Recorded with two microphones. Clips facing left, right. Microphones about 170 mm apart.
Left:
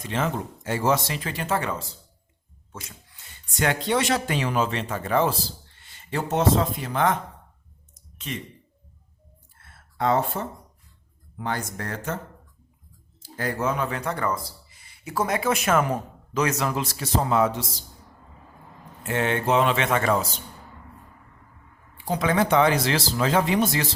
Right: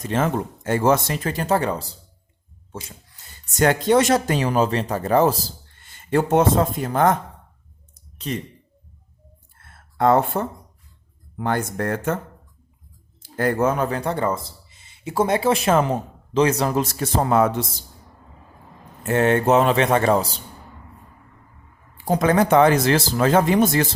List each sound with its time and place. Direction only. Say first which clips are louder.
0.0 s speech: right 5 dB; 45° right (ahead or behind)
7.9 s clicking: right 6 dB; 35° right (ahead or behind)
9.6 s a sound: right 6 dB; 50° right (ahead or behind)
11.3 s speech: right 7 dB; 55° right (ahead or behind)
13.3 s speech: right 6 dB; 50° right (ahead or behind)
19.0 s speech: right 6 dB; 45° right (ahead or behind)
21.9 s speech: right 5 dB; 45° right (ahead or behind)